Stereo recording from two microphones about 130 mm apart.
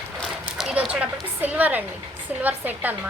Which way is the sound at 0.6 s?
5° right (ahead or behind).